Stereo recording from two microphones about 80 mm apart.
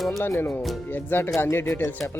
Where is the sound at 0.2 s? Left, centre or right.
Left.